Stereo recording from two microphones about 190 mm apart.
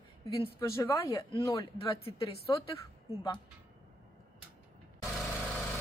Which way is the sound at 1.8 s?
30° left (ahead or behind).